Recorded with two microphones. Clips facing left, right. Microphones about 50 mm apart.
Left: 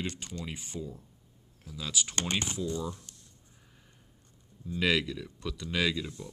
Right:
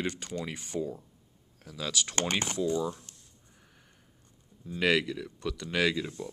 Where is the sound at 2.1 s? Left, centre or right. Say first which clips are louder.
Right 3 dB; right.